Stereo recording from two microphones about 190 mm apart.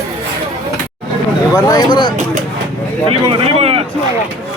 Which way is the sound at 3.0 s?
30° right (ahead or behind).